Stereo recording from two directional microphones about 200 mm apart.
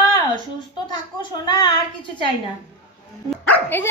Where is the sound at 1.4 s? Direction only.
20° left (ahead or behind).